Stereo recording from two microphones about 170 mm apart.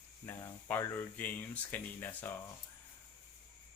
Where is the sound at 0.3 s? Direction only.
10° left (ahead or behind).